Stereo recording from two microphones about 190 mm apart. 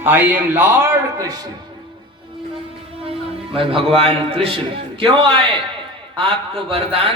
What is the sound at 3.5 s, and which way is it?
A man's voice, 30° right (ahead or behind).